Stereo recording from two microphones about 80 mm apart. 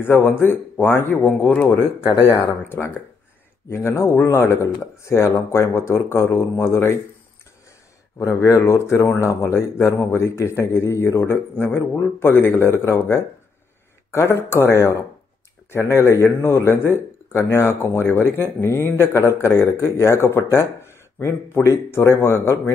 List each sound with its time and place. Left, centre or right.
0.0 s speech: left
8.2 s speech: left